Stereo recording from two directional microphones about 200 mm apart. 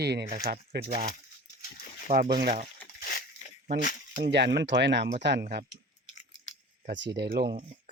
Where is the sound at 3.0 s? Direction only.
50° left (ahead or behind).